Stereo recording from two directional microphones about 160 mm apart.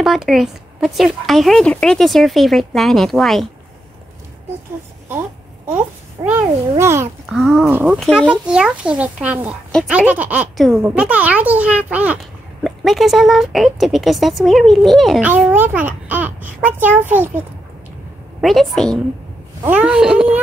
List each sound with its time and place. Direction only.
0.0 s speech: centre (ahead or behind)
5.7 s a child's voice: 10° right (ahead or behind)
7.2 s a child's voice: centre (ahead or behind)
9.7 s speech: 5° left (ahead or behind)
9.9 s a child's voice: 10° right (ahead or behind)
15.2 s a child's voice: 10° right (ahead or behind)
18.4 s speech: centre (ahead or behind)
19.6 s a child's voice: 10° right (ahead or behind)